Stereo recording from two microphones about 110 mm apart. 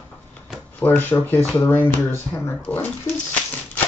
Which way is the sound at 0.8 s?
15° left (ahead or behind).